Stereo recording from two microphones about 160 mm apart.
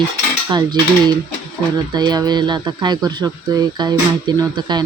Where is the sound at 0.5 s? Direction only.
25° right (ahead or behind).